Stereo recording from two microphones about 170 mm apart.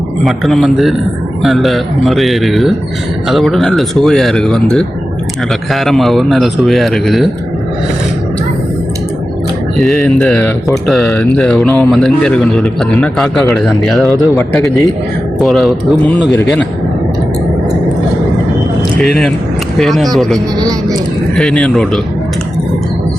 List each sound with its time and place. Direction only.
0.3 s speech: centre (ahead or behind)
9.7 s speech: centre (ahead or behind)
14.3 s a man's voice: 20° left (ahead or behind)
15.4 s speech: centre (ahead or behind)
18.9 s speech: 5° left (ahead or behind)